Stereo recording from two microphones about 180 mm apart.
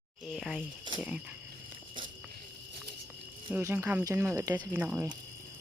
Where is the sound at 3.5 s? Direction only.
10° right (ahead or behind).